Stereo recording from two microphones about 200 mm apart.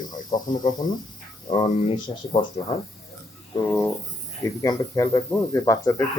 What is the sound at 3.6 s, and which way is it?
Speech, 10° left (ahead or behind).